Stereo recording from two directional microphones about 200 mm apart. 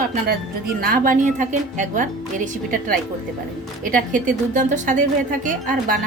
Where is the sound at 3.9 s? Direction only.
40° right (ahead or behind).